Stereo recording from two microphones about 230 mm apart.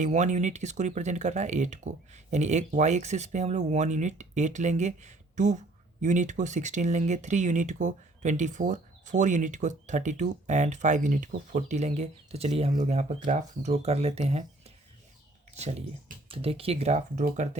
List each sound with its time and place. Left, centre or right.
0.0 s speech: right
15.5 s speech: right